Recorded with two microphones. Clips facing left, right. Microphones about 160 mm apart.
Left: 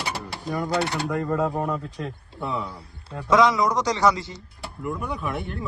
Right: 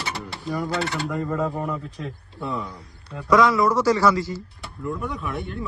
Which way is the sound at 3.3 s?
20° left (ahead or behind).